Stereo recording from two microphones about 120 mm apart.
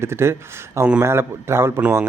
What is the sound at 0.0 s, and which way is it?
A man's voice, 20° right (ahead or behind).